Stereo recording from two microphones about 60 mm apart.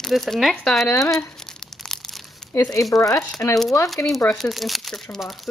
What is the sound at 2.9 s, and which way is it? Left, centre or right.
Speech, left.